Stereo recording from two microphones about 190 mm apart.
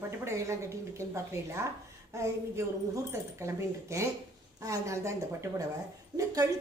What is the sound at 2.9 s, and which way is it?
A woman's voice, 15° right (ahead or behind).